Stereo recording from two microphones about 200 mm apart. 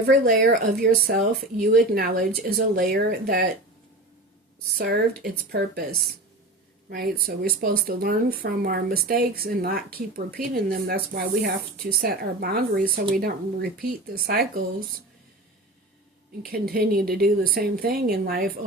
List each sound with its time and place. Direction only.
0.1 s speech: 45° right (ahead or behind)
5.5 s speech: 55° right (ahead or behind)
6.9 s speech: 50° right (ahead or behind)
16.5 s speech: 50° right (ahead or behind)